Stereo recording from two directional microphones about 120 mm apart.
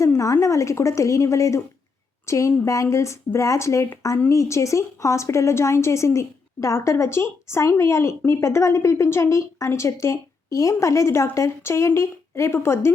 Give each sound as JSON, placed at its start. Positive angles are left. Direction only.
{"t": 0.0, "sound": "a woman's voice", "side_deg": 25}